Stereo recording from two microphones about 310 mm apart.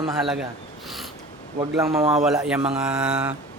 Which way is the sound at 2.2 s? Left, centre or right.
Centre.